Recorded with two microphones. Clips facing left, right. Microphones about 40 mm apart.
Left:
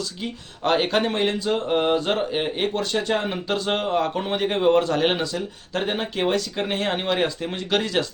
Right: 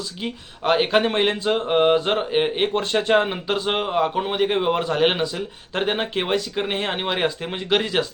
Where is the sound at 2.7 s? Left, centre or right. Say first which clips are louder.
Right 4 dB; right.